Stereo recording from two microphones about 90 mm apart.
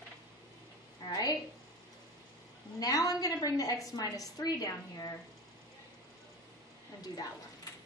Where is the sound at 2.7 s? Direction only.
45° left (ahead or behind).